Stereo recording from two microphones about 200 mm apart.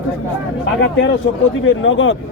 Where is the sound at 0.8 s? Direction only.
65° left (ahead or behind).